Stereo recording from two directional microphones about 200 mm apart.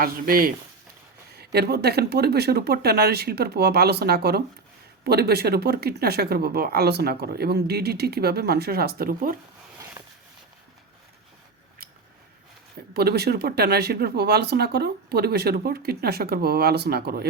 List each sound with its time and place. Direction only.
0.0 s speech: 45° right (ahead or behind)
12.9 s speech: 50° right (ahead or behind)